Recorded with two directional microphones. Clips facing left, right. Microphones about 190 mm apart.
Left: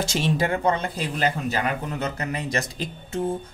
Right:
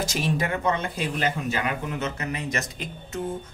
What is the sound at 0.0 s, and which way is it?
Speech, 30° left (ahead or behind).